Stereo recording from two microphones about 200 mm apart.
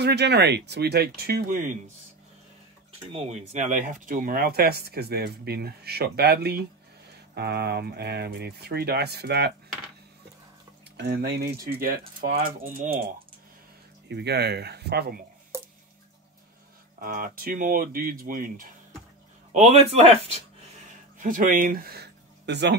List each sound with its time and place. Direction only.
0.0 s speech: 55° right (ahead or behind)
3.1 s speech: 30° right (ahead or behind); by 9.5 s 55° right (ahead or behind)
11.0 s speech: 55° right (ahead or behind)
14.0 s speech: 55° right (ahead or behind)
17.0 s speech: 45° right (ahead or behind)
19.5 s speech: 35° right (ahead or behind)
21.2 s speech: 40° right (ahead or behind); by 22.8 s 60° right (ahead or behind)